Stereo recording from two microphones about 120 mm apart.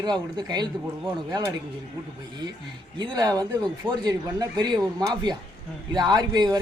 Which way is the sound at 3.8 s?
15° right (ahead or behind).